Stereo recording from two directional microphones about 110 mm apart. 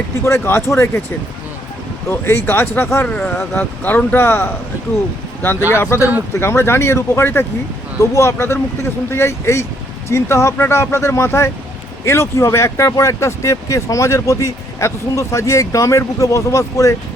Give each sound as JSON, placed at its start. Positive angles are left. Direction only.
{"t": 0.5, "sound": "speech", "side_deg": 20}
{"t": 2.0, "sound": "speech", "side_deg": 20}
{"t": 3.1, "sound": "speech", "side_deg": 10}